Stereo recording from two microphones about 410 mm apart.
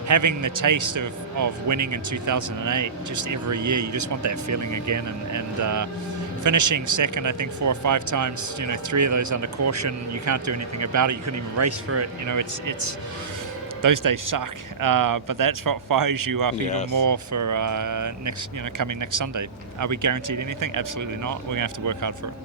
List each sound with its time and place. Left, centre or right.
0.1 s speech: right
13.8 s speech: right